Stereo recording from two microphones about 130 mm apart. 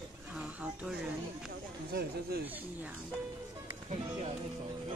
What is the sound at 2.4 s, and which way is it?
Speech, 15° right (ahead or behind).